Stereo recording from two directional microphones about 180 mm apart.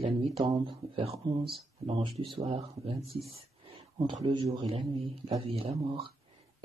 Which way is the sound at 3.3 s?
30° right (ahead or behind).